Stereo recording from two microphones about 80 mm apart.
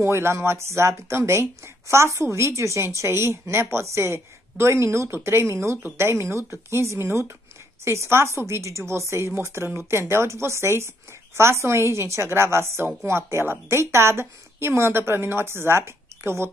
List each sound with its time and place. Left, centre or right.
0.0 s a woman's voice: right